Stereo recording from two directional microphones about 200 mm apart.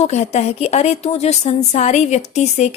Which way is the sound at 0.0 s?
35° left (ahead or behind).